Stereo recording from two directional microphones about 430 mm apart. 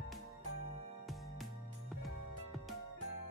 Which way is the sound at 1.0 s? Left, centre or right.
Centre.